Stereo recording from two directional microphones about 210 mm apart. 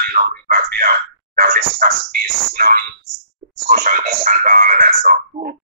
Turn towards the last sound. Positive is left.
turn(degrees=-40)  # may be behind; listen again after turning